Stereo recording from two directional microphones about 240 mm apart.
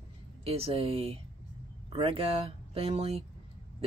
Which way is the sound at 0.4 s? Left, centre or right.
Right.